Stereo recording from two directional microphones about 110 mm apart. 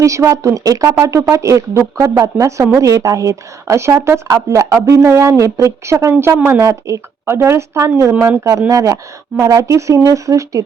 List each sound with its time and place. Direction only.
0.0 s speech: 30° right (ahead or behind)